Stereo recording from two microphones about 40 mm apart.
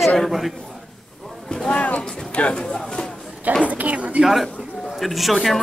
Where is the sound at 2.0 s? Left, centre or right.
Centre.